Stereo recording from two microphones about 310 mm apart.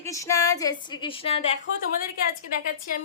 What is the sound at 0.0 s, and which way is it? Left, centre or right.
A woman's voice, centre.